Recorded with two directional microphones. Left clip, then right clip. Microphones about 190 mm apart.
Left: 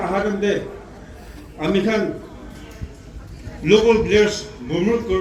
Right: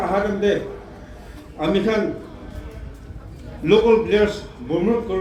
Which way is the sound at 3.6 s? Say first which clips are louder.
Left 1 dB; 35° right (ahead or behind).